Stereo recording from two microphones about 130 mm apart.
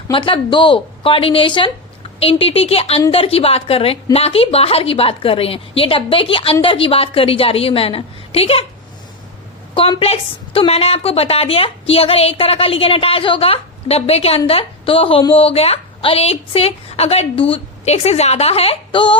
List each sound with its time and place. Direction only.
0.1 s a woman's voice: 40° left (ahead or behind)
10.0 s a woman's voice: 45° left (ahead or behind)